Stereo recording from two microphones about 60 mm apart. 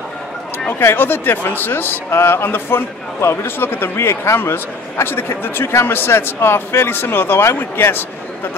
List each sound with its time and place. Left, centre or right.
0.7 s a man's voice: left